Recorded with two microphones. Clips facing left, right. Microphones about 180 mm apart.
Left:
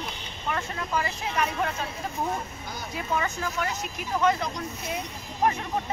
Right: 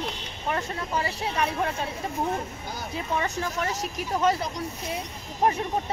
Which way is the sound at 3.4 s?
40° right (ahead or behind).